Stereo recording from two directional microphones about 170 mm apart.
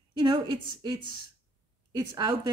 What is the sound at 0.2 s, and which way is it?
A woman's voice, 25° right (ahead or behind).